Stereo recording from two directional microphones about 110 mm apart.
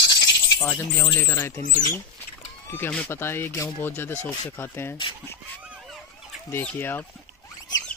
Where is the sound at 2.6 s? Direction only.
20° left (ahead or behind).